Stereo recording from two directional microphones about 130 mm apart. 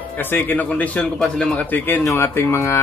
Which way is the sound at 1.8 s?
15° left (ahead or behind).